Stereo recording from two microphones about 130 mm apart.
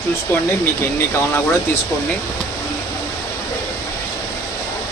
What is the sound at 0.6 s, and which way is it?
Speech, 20° left (ahead or behind).